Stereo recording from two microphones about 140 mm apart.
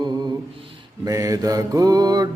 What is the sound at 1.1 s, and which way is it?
Mantra, 25° right (ahead or behind).